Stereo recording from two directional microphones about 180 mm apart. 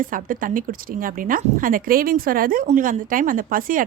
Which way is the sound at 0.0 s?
50° right (ahead or behind).